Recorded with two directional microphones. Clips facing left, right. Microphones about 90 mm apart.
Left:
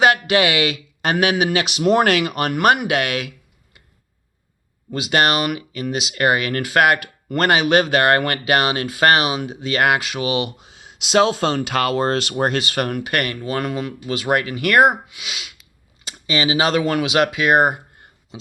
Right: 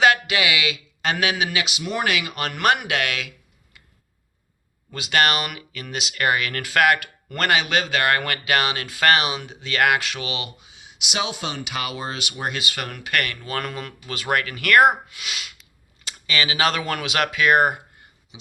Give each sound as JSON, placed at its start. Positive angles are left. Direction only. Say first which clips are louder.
{"t": 0.0, "sound": "a sound", "louder": "left 3 dB", "side_deg": 35}
{"t": 1.1, "sound": "speech", "louder": "left 6 dB", "side_deg": 25}
{"t": 1.9, "sound": "speech", "louder": "left 10 dB", "side_deg": 75}
{"t": 2.3, "sound": "speech", "louder": "left 5 dB", "side_deg": 20}
{"t": 5.1, "sound": "speech", "louder": "left 3 dB", "side_deg": 35}
{"t": 11.1, "sound": "speech", "louder": "left 11 dB", "side_deg": 90}
{"t": 12.3, "sound": "speech", "louder": "left 9 dB", "side_deg": 60}
{"t": 12.7, "sound": "speech", "louder": "left 5 dB", "side_deg": 40}
{"t": 13.6, "sound": "speech", "louder": "left 6 dB", "side_deg": 15}
{"t": 15.1, "sound": "speech", "louder": "even", "side_deg": 5}
{"t": 16.1, "sound": "speech", "louder": "left 4 dB", "side_deg": 25}